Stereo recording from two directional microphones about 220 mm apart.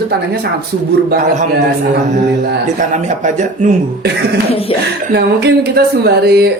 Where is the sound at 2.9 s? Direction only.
35° right (ahead or behind).